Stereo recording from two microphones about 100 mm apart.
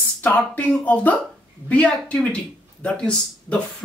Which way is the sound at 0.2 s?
15° left (ahead or behind).